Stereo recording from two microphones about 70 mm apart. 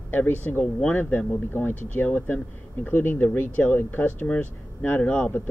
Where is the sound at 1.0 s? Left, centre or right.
Left.